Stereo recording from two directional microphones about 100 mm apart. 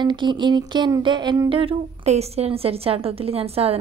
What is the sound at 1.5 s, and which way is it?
A woman's voice, 65° right (ahead or behind).